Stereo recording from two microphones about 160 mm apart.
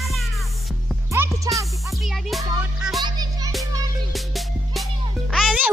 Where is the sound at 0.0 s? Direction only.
Centre (ahead or behind).